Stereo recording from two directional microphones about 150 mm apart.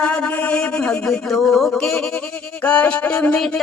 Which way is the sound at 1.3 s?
5° left (ahead or behind).